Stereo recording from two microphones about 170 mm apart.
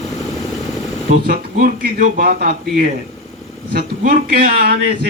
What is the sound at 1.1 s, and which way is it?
A man's voice, 60° right (ahead or behind).